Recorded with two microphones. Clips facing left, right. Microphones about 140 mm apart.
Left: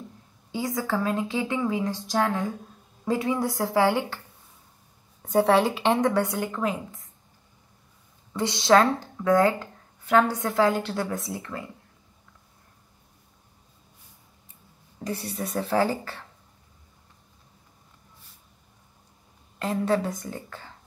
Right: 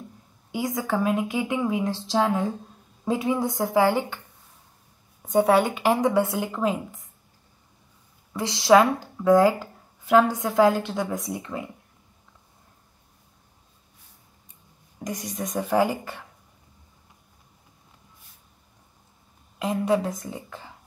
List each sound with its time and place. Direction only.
0.5 s a woman's voice: 20° right (ahead or behind)
5.3 s a woman's voice: centre (ahead or behind)
6.0 s speech: 15° right (ahead or behind)
6.3 s speech: 5° right (ahead or behind)
8.3 s a woman's voice: centre (ahead or behind)
11.2 s a woman's voice: 20° right (ahead or behind)
15.0 s speech: 15° right (ahead or behind)
15.3 s a woman's voice: 5° left (ahead or behind)
15.6 s speech: 15° right (ahead or behind)
19.9 s speech: centre (ahead or behind)